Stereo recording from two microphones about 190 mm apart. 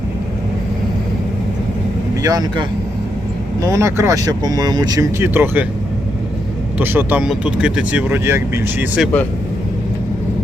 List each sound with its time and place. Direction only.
2.2 s speech: 20° right (ahead or behind)
6.7 s speech: 10° right (ahead or behind)